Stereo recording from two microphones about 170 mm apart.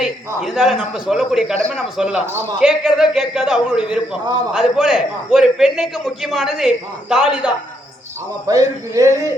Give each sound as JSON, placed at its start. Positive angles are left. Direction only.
{"t": 0.0, "sound": "a man's voice", "side_deg": -5}
{"t": 8.4, "sound": "a man's voice", "side_deg": -20}